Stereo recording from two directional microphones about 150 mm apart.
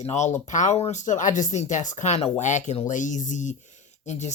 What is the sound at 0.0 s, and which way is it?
Speech, 50° left (ahead or behind).